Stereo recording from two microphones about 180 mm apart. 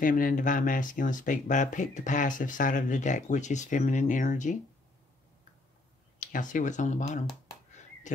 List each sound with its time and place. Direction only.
0.0 s speech: 50° left (ahead or behind)
6.1 s speech: 45° left (ahead or behind)